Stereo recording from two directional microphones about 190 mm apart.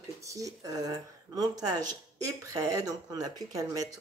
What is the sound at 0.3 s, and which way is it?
Speech, 20° right (ahead or behind).